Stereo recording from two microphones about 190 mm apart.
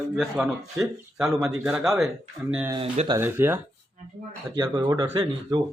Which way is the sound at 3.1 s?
10° right (ahead or behind).